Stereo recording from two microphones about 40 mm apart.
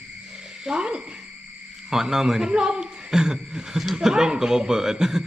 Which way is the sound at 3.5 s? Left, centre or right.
Centre.